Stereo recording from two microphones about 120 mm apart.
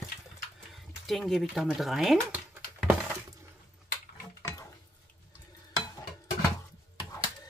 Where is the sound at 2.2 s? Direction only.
10° right (ahead or behind).